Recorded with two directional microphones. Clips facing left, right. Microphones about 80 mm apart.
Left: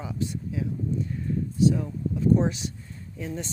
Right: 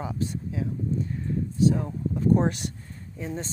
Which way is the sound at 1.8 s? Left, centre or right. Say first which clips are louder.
Even; right.